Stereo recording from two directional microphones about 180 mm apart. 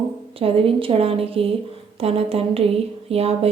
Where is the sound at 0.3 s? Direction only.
30° right (ahead or behind).